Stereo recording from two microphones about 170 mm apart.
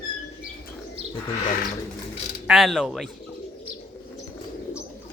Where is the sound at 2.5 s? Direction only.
Centre (ahead or behind).